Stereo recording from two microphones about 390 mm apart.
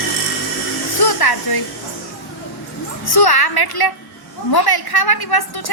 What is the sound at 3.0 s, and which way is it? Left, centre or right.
A woman's voice, left.